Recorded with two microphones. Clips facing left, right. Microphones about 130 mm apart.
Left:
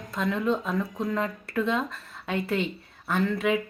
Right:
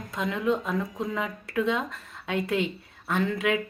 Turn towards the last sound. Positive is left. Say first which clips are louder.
# left 1 dB
turn(degrees=0)  # may be behind; listen again after turning